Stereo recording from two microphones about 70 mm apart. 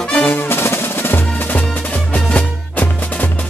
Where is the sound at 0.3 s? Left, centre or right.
Left.